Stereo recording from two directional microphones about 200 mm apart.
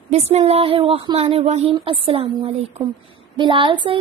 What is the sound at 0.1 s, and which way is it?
A woman's voice, 30° right (ahead or behind).